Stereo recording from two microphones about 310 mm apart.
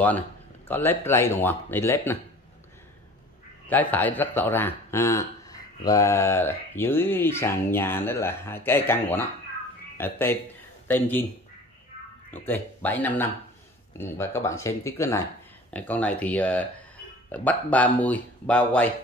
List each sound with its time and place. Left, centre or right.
0.7 s speech: centre
3.6 s speech: centre
12.3 s speech: centre